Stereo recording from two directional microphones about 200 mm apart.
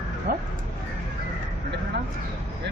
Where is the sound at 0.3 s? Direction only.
45° right (ahead or behind).